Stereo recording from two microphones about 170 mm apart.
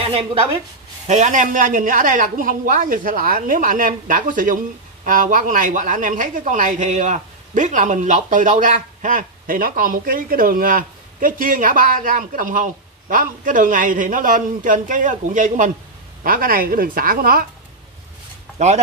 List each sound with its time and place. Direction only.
0.0 s a woman's voice: 35° right (ahead or behind)
1.0 s a woman's voice: 45° right (ahead or behind)